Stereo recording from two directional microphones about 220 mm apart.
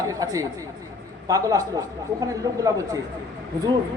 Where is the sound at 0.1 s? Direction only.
15° right (ahead or behind).